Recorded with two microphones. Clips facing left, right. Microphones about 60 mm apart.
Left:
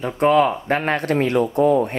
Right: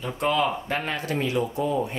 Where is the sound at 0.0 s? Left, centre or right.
Left.